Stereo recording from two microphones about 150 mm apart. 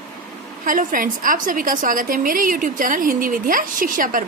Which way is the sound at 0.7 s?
65° right (ahead or behind).